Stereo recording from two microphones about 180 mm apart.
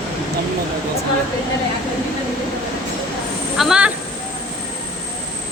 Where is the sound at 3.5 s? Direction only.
5° right (ahead or behind).